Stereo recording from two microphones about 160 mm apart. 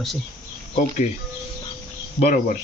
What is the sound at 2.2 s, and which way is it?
Speech, 55° left (ahead or behind).